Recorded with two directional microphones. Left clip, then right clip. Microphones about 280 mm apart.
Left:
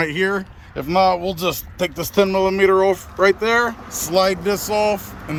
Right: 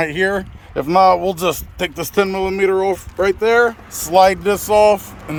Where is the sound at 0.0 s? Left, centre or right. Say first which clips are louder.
Right 2 dB; centre.